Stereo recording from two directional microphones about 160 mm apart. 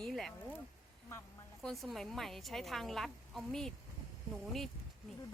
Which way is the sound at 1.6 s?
Centre (ahead or behind).